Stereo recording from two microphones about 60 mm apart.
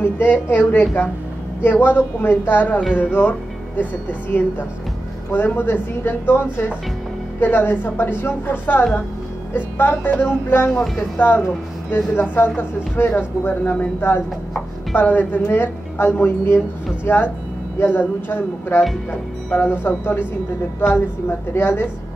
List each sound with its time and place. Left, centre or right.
0.0 s speech: left